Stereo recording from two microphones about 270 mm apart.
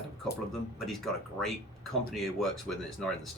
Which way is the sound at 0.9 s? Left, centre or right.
Centre.